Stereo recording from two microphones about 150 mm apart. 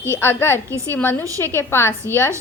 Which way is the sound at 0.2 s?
15° left (ahead or behind).